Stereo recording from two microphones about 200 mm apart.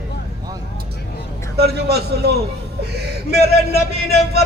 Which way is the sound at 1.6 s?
55° right (ahead or behind).